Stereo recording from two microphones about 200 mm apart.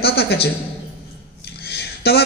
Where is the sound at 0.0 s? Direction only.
50° left (ahead or behind).